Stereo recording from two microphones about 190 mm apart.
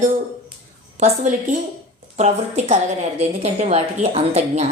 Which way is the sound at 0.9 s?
35° right (ahead or behind).